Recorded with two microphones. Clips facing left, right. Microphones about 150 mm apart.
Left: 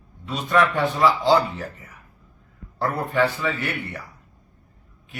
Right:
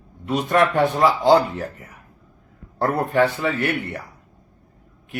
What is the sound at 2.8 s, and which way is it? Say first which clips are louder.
Speech: right 3 dB; 55° right (ahead or behind).